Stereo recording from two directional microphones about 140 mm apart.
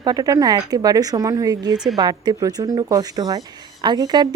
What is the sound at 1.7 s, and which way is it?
Speech, 5° right (ahead or behind).